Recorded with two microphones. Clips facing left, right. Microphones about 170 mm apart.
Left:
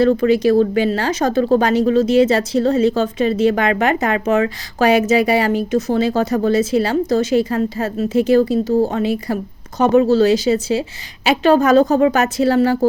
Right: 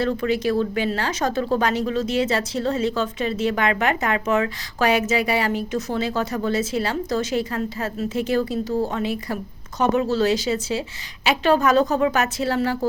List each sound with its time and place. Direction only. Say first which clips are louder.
0.0 s speech: left 8 dB; 40° left (ahead or behind)